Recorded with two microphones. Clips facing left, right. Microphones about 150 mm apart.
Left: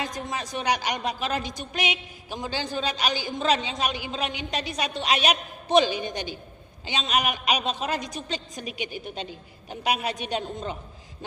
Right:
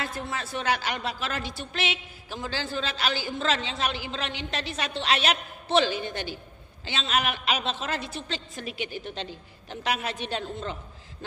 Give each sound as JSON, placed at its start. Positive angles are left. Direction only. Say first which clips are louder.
{"t": 0.0, "sound": "a woman's voice", "louder": "left 1 dB", "side_deg": 15}